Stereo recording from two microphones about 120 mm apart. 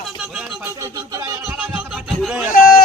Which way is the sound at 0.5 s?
20° right (ahead or behind).